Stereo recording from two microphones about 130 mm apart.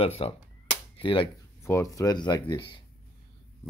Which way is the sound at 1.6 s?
20° left (ahead or behind).